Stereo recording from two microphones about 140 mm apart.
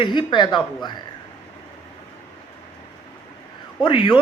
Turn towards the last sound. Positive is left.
turn(degrees=35)  # may be behind; listen again after turning